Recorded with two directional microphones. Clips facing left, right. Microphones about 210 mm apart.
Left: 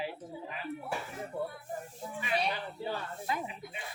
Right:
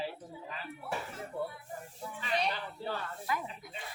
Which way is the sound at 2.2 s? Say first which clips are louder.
Left 1 dB; 10° left (ahead or behind).